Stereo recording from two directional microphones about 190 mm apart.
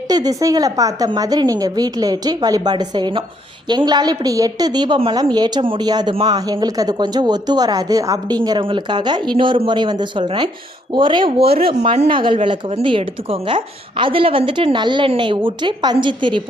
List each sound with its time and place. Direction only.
0.1 s a woman's voice: 20° right (ahead or behind)